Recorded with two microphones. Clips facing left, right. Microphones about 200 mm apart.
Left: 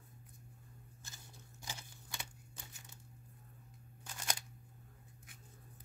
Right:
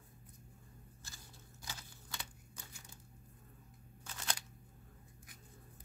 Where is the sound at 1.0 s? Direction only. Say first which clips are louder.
Left 2 dB; 20° left (ahead or behind).